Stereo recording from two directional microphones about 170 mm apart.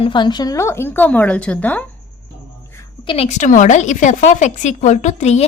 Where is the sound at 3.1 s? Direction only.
40° left (ahead or behind).